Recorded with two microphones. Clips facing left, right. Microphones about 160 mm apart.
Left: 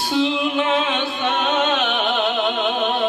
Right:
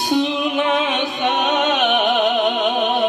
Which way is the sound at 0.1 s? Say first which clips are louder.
Right 1 dB; 15° right (ahead or behind).